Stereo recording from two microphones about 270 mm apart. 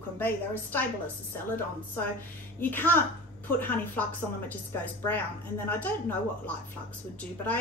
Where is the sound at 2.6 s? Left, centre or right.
Centre.